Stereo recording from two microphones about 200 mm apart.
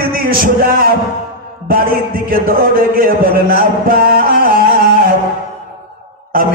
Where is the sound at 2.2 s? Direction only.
45° right (ahead or behind).